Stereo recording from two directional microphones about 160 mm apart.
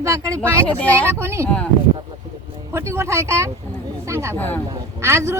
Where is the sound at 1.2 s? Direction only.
15° right (ahead or behind).